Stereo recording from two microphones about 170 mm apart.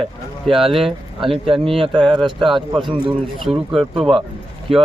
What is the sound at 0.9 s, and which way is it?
Speech, 30° right (ahead or behind).